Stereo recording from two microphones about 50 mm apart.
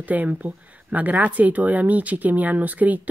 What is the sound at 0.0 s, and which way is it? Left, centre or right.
Speech, right.